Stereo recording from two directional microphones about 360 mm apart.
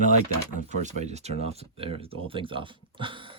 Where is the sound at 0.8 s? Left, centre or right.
Centre.